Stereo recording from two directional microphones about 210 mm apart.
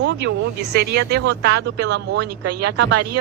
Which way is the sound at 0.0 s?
55° right (ahead or behind).